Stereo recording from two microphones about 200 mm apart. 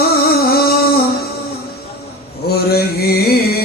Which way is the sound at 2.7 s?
50° left (ahead or behind).